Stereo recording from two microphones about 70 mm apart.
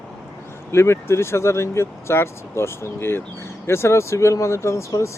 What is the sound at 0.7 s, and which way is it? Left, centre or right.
Speech, left.